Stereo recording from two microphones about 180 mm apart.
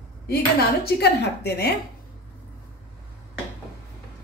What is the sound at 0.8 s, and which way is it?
Speech, 65° left (ahead or behind).